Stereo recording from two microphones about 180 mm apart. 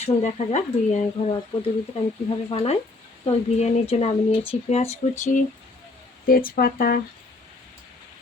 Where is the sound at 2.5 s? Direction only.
35° left (ahead or behind).